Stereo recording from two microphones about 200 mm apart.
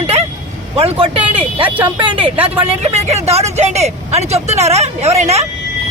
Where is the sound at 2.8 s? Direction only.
30° right (ahead or behind).